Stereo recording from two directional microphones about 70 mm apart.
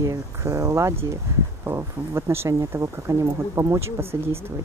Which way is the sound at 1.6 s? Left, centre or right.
Right.